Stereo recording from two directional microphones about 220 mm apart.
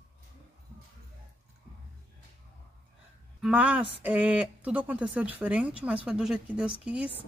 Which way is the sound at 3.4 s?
5° right (ahead or behind).